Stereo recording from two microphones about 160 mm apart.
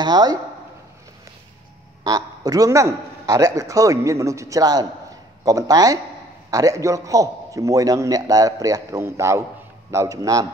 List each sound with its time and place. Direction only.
0.0 s a man's voice: 25° right (ahead or behind)
2.0 s a man's voice: 25° right (ahead or behind)